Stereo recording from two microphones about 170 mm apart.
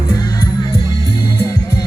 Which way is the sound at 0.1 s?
25° left (ahead or behind).